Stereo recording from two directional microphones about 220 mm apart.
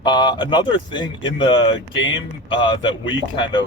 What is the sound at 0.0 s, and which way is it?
Speech, 20° left (ahead or behind).